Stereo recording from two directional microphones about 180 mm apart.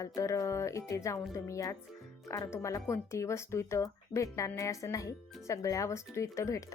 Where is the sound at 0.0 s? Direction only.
20° left (ahead or behind).